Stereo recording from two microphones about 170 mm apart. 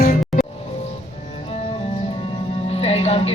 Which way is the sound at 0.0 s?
60° left (ahead or behind).